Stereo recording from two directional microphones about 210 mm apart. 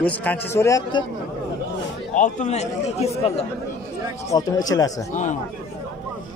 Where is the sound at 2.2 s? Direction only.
35° left (ahead or behind).